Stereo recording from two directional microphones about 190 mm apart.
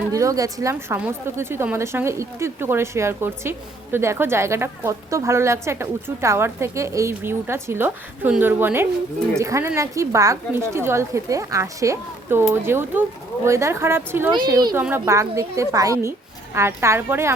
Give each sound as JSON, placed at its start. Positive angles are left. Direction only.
{"t": 0.1, "sound": "a woman's voice", "side_deg": -15}